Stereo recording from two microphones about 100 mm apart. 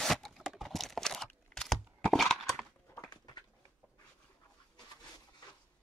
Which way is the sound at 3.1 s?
45° left (ahead or behind).